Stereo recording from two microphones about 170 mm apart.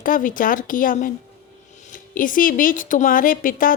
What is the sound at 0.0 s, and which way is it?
Speech, 55° left (ahead or behind).